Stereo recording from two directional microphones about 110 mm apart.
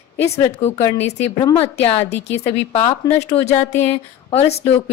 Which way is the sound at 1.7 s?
70° left (ahead or behind).